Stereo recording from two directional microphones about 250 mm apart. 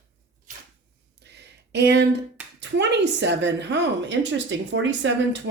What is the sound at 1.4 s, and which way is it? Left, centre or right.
Speech, right.